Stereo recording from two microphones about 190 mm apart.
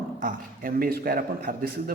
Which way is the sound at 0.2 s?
45° right (ahead or behind).